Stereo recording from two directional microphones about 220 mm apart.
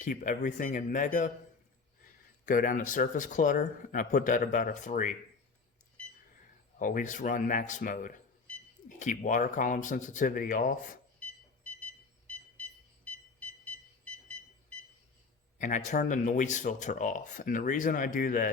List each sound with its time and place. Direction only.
0.0 s speech: 35° left (ahead or behind)
2.5 s speech: 35° left (ahead or behind)
6.7 s speech: 40° left (ahead or behind)
15.5 s speech: 35° left (ahead or behind)